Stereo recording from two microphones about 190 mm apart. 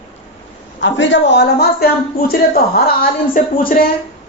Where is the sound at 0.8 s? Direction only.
75° left (ahead or behind); by 3.9 s 50° left (ahead or behind).